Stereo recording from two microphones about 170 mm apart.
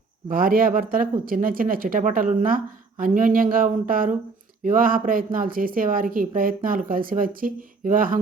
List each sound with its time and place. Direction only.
0.3 s a woman's voice: 55° right (ahead or behind)